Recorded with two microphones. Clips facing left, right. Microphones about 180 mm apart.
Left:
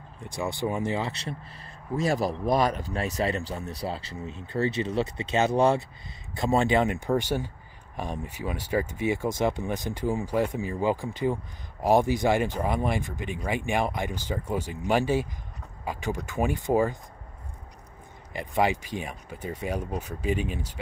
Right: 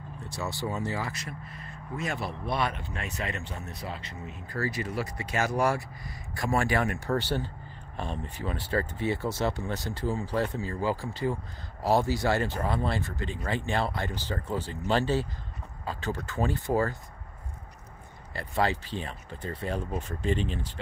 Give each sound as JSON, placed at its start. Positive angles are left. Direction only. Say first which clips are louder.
{"t": 0.6, "sound": "speech", "louder": "left 4 dB", "side_deg": 15}
{"t": 18.3, "sound": "speech", "louder": "left 3 dB", "side_deg": 15}